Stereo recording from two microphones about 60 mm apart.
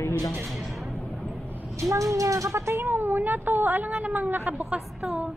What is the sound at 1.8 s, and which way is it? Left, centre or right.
Speech, right.